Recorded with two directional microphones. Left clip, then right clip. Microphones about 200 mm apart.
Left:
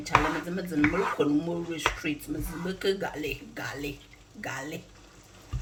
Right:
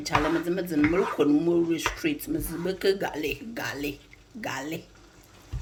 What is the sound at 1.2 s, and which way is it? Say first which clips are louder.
Speech: right 4 dB; 50° right (ahead or behind).